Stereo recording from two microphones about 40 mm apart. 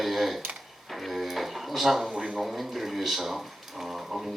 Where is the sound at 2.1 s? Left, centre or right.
Right.